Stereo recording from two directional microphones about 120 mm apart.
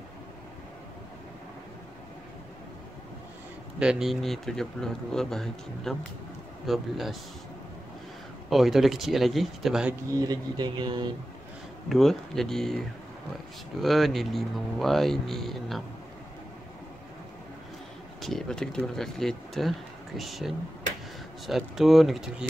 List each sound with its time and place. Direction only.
3.8 s speech: 5° right (ahead or behind)
8.5 s speech: centre (ahead or behind)
10.2 s speech: 35° right (ahead or behind)
11.9 s speech: centre (ahead or behind)
18.2 s speech: 5° left (ahead or behind)